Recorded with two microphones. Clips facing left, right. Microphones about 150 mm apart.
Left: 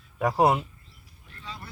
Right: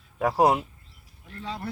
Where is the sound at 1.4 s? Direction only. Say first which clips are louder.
Right 7 dB; 70° right (ahead or behind).